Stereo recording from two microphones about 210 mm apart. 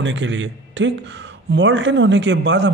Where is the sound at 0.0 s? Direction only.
60° right (ahead or behind).